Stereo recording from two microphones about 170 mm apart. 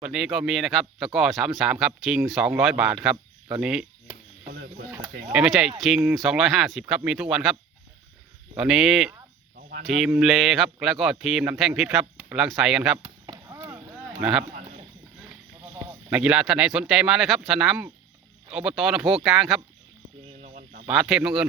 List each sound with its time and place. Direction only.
0.0 s speech: centre (ahead or behind)
4.5 s mechanisms: 70° right (ahead or behind)
5.3 s speech: 5° right (ahead or behind)
8.5 s speech: 5° right (ahead or behind)
13.2 s chop: 20° right (ahead or behind)
14.2 s speech: 5° right (ahead or behind)
15.7 s speech: 10° right (ahead or behind)
20.4 s a sound: 45° right (ahead or behind)
20.8 s speech: 5° right (ahead or behind)